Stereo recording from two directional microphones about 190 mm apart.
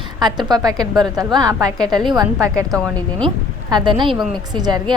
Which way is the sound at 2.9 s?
5° left (ahead or behind).